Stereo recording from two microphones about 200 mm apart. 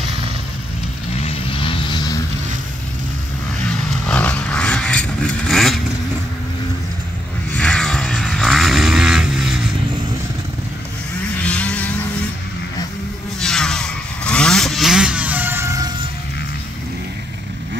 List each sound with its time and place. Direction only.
1.2 s vehicle: 30° left (ahead or behind)
4.1 s vehicle: 5° left (ahead or behind)
7.5 s vehicle: 5° left (ahead or behind)
11.4 s vehicle: 5° left (ahead or behind)
13.4 s vehicle: 5° left (ahead or behind); by 15.9 s 15° right (ahead or behind)